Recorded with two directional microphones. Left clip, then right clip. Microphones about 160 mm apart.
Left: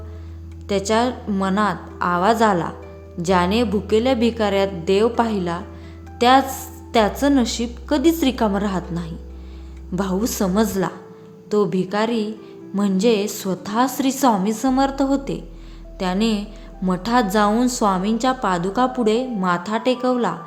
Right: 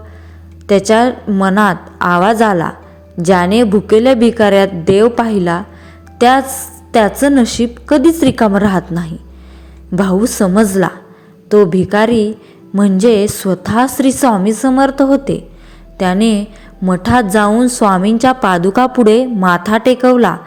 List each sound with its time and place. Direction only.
0.7 s a woman's voice: 35° right (ahead or behind)
6.5 s a sound: 35° right (ahead or behind)
7.2 s a woman's voice: 30° right (ahead or behind)